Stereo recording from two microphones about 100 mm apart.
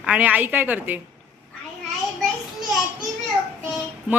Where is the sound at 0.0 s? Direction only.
15° right (ahead or behind).